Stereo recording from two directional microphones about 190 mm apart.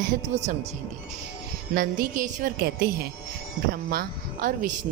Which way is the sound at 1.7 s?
50° right (ahead or behind).